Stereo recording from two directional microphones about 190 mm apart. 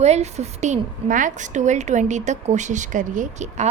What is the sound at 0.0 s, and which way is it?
A woman's voice, 35° right (ahead or behind).